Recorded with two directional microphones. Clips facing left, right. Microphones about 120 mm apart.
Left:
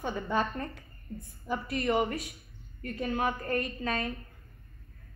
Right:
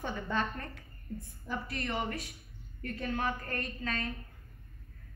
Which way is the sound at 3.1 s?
15° left (ahead or behind).